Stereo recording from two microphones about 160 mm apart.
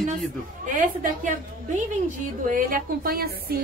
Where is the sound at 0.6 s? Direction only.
55° right (ahead or behind).